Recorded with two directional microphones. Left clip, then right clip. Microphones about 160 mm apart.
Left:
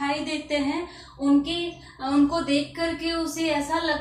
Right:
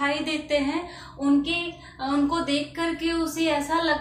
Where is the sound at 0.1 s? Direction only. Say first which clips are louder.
Right 2 dB; 25° right (ahead or behind).